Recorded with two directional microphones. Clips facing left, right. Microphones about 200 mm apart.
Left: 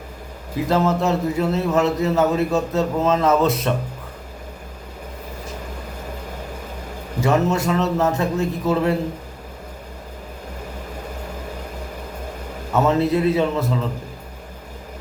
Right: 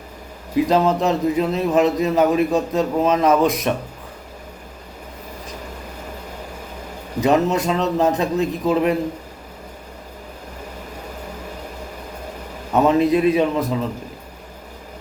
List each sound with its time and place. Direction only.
0.5 s a man's voice: 15° right (ahead or behind)
7.2 s a man's voice: 20° right (ahead or behind)
12.7 s a man's voice: 15° right (ahead or behind)